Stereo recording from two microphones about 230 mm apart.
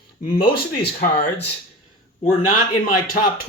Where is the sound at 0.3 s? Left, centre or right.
Left.